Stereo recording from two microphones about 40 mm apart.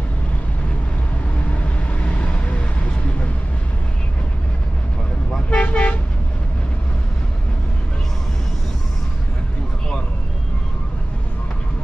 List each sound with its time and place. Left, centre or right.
1.5 s vehicle: left
5.5 s toot: left